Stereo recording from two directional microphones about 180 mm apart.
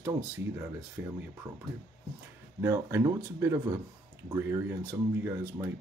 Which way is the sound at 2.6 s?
15° right (ahead or behind).